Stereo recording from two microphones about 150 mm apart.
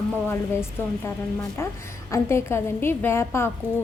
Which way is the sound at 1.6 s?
15° left (ahead or behind).